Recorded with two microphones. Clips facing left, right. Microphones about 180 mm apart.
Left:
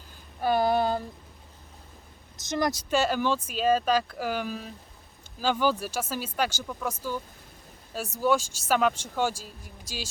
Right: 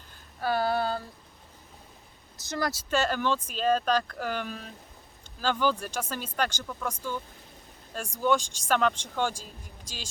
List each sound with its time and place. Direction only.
0.4 s a sound: 20° left (ahead or behind)
2.4 s speech: 20° left (ahead or behind)
8.2 s speech: 5° left (ahead or behind)